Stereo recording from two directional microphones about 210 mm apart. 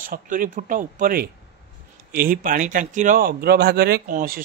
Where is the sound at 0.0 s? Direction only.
40° right (ahead or behind).